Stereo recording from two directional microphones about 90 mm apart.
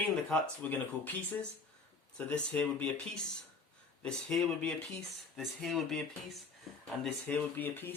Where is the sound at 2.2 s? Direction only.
15° left (ahead or behind).